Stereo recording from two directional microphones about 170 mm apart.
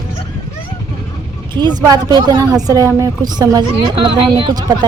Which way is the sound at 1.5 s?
25° right (ahead or behind).